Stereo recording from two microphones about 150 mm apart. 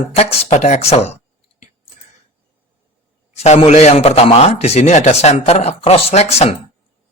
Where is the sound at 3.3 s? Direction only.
45° left (ahead or behind).